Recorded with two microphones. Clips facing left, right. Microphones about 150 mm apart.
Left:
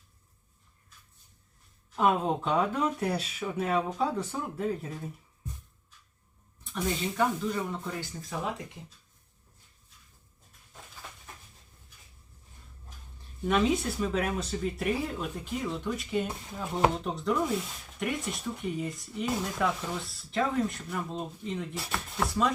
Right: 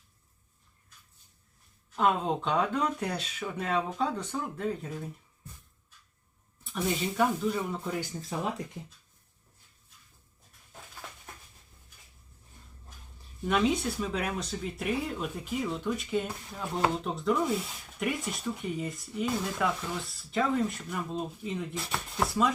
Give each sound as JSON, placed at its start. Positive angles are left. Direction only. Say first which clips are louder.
{"t": 2.0, "sound": "speech", "louder": "left 1 dB", "side_deg": 5}
{"t": 6.7, "sound": "speech", "louder": "right 1 dB", "side_deg": -5}
{"t": 8.1, "sound": "speech", "louder": "right 3 dB", "side_deg": -25}
{"t": 13.4, "sound": "speech", "louder": "left 1 dB", "side_deg": 0}